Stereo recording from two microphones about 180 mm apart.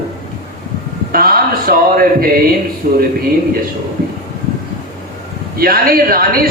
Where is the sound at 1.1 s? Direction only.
55° right (ahead or behind).